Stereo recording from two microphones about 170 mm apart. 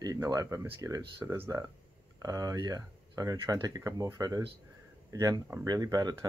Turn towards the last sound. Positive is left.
turn(degrees=-20)  # may be behind; listen again after turning